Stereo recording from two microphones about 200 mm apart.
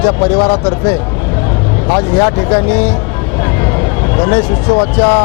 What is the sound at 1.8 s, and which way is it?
Speech, 25° left (ahead or behind).